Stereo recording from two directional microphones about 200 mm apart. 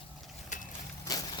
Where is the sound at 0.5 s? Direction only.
40° left (ahead or behind).